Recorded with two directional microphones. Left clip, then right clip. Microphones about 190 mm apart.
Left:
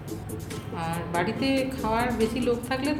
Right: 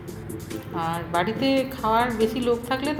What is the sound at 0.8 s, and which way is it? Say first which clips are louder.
A woman's voice: right 4 dB; 15° right (ahead or behind).